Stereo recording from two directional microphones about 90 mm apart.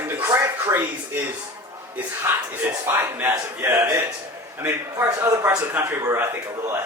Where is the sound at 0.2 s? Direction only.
30° right (ahead or behind).